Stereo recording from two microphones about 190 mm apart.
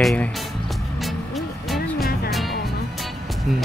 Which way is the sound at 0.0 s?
5° left (ahead or behind).